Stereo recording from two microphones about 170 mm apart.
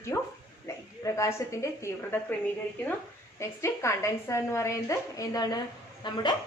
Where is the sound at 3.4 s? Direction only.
15° left (ahead or behind).